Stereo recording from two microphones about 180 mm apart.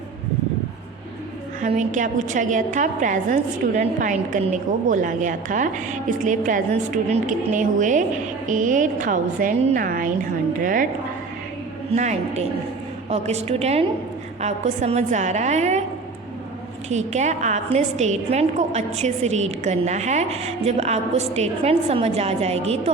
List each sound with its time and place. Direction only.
1.6 s a woman's voice: 40° right (ahead or behind)
11.9 s a woman's voice: 40° right (ahead or behind)
16.9 s a woman's voice: 40° right (ahead or behind)